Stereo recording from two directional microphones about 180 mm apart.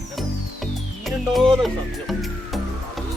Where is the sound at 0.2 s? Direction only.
Centre (ahead or behind).